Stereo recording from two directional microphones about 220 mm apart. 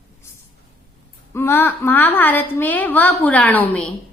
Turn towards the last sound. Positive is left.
turn(degrees=5)  # may be behind; listen again after turning